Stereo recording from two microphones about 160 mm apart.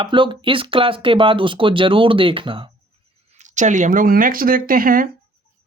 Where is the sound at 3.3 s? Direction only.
50° right (ahead or behind).